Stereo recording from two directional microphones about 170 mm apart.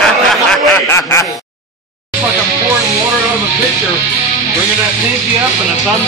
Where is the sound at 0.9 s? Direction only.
15° left (ahead or behind).